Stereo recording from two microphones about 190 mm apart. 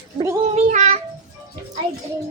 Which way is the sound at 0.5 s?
35° right (ahead or behind).